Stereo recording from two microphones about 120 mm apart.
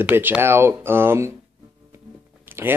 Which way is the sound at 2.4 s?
20° right (ahead or behind).